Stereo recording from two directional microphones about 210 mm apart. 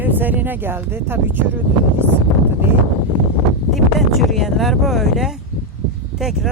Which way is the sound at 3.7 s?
Centre (ahead or behind).